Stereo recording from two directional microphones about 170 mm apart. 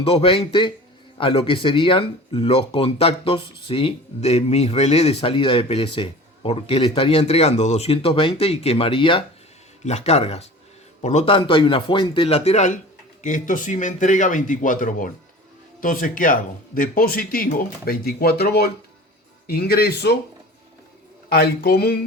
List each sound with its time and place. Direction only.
0.0 s speech: 35° left (ahead or behind); by 20.1 s 70° left (ahead or behind)
21.2 s speech: 65° left (ahead or behind)